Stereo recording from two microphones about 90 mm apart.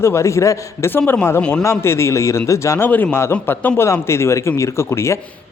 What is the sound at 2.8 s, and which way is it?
Speech, 20° left (ahead or behind).